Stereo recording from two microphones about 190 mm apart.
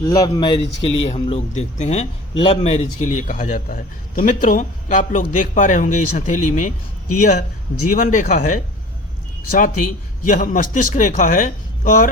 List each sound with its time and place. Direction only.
0.0 s a man's voice: 20° left (ahead or behind); by 6.7 s 40° left (ahead or behind)
7.9 s a man's voice: 45° left (ahead or behind)